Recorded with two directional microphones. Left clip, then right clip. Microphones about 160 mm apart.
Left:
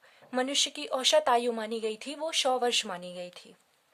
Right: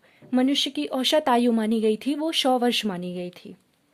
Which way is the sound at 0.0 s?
10° right (ahead or behind).